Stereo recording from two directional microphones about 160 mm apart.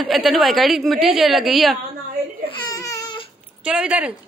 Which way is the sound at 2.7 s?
20° left (ahead or behind).